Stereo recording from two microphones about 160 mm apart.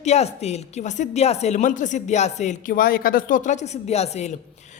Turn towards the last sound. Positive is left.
turn(degrees=45)  # may be behind; listen again after turning